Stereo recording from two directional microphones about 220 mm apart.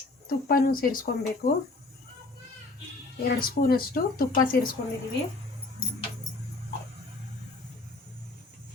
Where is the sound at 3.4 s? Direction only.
40° left (ahead or behind).